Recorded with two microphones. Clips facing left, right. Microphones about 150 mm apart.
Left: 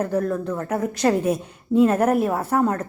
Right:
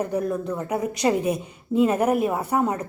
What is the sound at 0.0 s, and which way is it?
A woman's voice, 10° right (ahead or behind).